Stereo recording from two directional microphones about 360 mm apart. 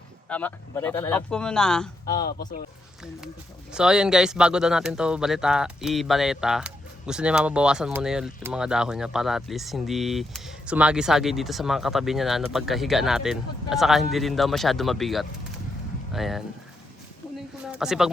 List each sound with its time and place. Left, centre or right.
0.3 s speech: centre
3.7 s speech: centre
17.7 s speech: centre